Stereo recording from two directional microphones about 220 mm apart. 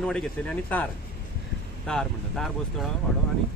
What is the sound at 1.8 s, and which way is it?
Speech, centre (ahead or behind).